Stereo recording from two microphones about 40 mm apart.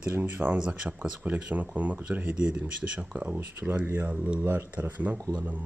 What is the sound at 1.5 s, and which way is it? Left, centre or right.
Speech, right.